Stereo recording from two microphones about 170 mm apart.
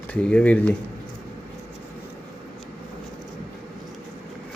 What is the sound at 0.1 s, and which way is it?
Speech, 5° left (ahead or behind).